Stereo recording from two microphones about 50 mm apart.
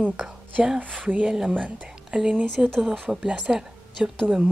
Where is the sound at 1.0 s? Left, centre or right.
Right.